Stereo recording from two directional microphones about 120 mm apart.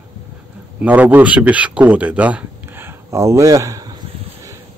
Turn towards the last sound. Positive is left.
turn(degrees=-30)  # may be behind; listen again after turning